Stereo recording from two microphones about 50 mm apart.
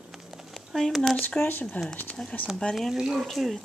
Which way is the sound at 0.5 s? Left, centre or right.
Centre.